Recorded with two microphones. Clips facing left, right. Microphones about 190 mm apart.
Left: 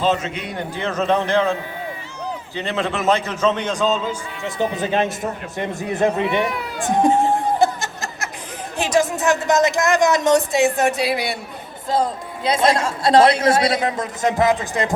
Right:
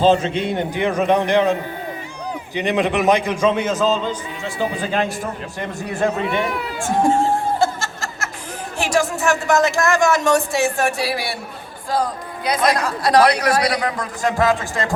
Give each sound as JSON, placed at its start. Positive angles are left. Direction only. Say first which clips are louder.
{"t": 0.0, "sound": "a man's voice", "louder": "right 5 dB", "side_deg": -30}
{"t": 2.6, "sound": "a man's voice", "louder": "right 5 dB", "side_deg": -15}
{"t": 4.8, "sound": "speech", "louder": "left 1 dB", "side_deg": 20}
{"t": 6.4, "sound": "speech", "louder": "even", "side_deg": 0}
{"t": 6.8, "sound": "music", "louder": "left 1 dB", "side_deg": 20}
{"t": 8.8, "sound": "speech", "louder": "left 1 dB", "side_deg": 20}